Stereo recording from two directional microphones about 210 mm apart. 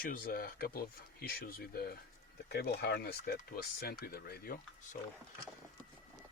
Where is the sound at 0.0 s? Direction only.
45° left (ahead or behind).